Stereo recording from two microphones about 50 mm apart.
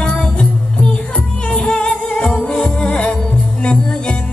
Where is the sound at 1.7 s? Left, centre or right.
Left.